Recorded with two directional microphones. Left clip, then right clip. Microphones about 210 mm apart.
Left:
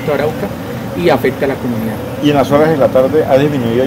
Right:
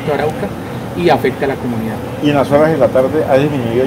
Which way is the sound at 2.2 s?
20° left (ahead or behind).